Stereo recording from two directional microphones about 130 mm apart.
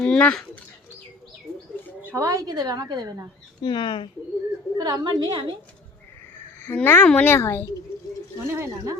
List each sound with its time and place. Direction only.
0.0 s speech: 10° left (ahead or behind)
2.0 s a woman's voice: 20° right (ahead or behind)
3.6 s speech: 35° left (ahead or behind)
4.8 s a woman's voice: 35° right (ahead or behind)
6.6 s a child's voice: 15° left (ahead or behind)
8.5 s a woman's voice: 25° right (ahead or behind)